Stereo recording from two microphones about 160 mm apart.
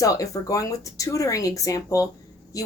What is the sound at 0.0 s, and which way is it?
Speech, 20° left (ahead or behind).